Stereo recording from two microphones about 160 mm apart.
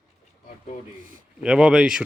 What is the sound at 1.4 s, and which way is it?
Speech, 5° right (ahead or behind).